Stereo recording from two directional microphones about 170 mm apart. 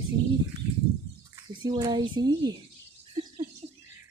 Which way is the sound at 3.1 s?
30° right (ahead or behind).